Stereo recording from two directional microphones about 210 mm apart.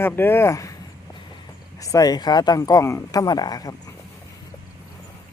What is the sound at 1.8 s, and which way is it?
Speech, 15° left (ahead or behind).